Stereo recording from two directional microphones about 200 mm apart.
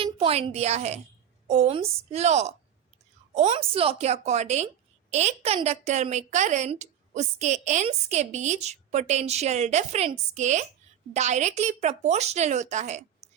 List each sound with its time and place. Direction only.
0.0 s a woman's voice: 30° right (ahead or behind)